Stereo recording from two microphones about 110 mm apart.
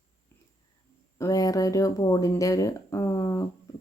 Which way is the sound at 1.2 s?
30° left (ahead or behind).